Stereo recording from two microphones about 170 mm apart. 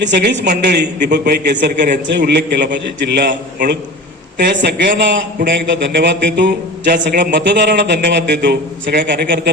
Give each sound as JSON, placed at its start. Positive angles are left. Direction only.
{"t": 0.0, "sound": "a man's voice", "side_deg": -90}
{"t": 0.5, "sound": "a man's voice", "side_deg": -75}
{"t": 2.0, "sound": "a man's voice", "side_deg": -85}
{"t": 4.4, "sound": "a man's voice", "side_deg": -80}